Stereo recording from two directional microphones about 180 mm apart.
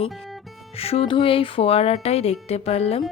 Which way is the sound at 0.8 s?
35° left (ahead or behind).